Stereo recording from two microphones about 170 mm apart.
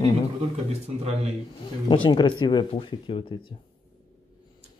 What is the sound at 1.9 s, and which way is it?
Speech, 30° left (ahead or behind).